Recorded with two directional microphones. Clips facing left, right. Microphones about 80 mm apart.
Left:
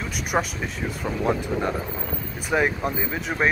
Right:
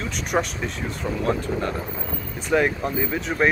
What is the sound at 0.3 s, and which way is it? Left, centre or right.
Speech, centre.